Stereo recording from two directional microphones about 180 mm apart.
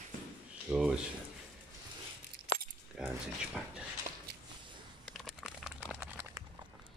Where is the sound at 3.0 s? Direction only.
5° right (ahead or behind).